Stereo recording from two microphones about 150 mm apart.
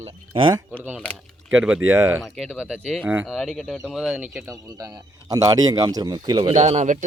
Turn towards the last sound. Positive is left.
turn(degrees=-55)  # may be behind; listen again after turning